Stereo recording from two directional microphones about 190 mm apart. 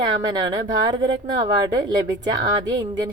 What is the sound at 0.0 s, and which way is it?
Speech, 20° right (ahead or behind).